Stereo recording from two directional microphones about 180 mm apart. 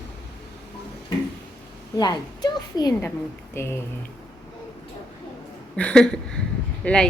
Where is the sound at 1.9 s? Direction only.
25° left (ahead or behind).